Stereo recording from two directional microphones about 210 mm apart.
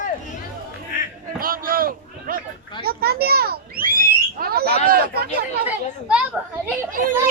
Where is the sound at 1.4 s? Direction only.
40° right (ahead or behind).